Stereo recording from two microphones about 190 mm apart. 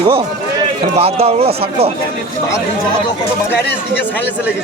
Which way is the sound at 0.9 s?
30° right (ahead or behind).